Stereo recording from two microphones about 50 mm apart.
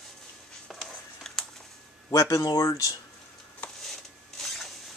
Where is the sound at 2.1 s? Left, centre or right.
Left.